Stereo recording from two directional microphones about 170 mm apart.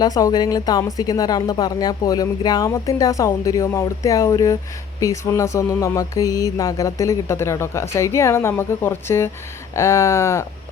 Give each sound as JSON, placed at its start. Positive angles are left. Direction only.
{"t": 0.0, "sound": "speech", "side_deg": 20}
{"t": 4.9, "sound": "mantra", "side_deg": 20}